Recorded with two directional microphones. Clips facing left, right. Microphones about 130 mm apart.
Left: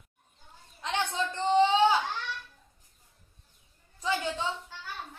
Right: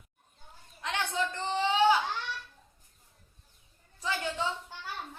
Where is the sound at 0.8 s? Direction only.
20° left (ahead or behind).